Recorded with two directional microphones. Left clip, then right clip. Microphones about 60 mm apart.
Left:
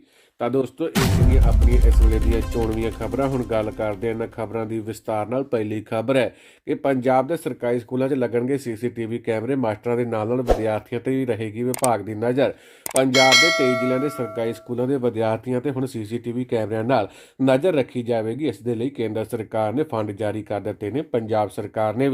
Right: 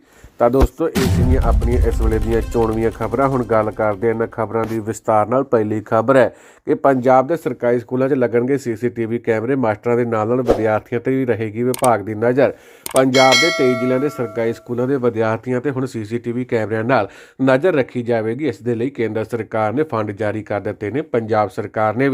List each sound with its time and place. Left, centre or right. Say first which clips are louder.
0.9 s speech: right 3 dB; centre
5.1 s speech: right 8 dB; right
13.1 s speech: right 1 dB; centre
14.0 s speech: right 5 dB; right